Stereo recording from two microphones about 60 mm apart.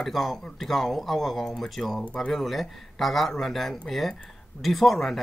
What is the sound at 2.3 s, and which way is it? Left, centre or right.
Speech, centre.